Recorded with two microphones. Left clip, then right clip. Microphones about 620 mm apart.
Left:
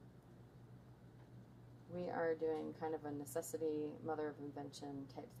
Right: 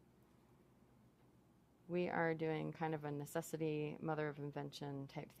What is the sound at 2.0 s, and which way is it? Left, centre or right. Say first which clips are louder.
A woman's voice: right 1 dB; right.